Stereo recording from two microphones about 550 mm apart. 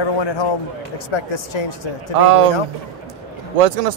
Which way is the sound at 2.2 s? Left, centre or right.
Right.